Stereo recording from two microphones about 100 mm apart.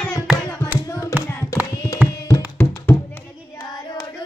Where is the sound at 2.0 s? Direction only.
15° right (ahead or behind).